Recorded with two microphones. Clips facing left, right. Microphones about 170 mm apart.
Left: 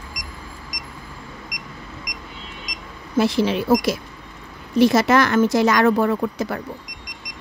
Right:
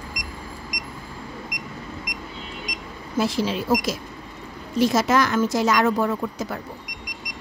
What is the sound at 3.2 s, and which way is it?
A woman's voice, 65° left (ahead or behind).